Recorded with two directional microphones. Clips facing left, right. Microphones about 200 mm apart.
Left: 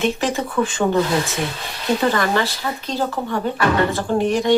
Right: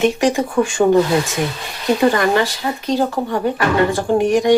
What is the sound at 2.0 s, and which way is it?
Speech, 15° right (ahead or behind).